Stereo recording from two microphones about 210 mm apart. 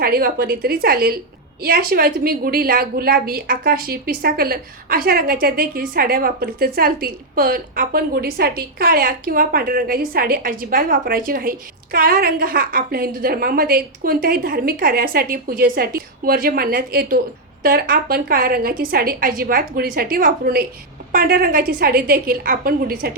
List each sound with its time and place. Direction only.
0.0 s a woman's voice: 45° right (ahead or behind)